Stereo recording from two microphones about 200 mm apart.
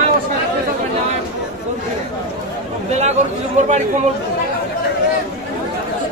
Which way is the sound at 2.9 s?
35° right (ahead or behind).